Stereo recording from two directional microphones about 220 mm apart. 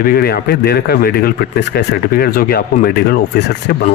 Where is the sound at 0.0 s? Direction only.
45° left (ahead or behind).